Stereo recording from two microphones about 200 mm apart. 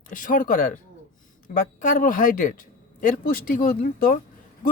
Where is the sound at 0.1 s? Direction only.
40° left (ahead or behind).